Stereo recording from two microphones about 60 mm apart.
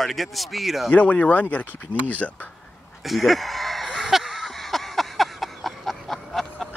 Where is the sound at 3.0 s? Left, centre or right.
Centre.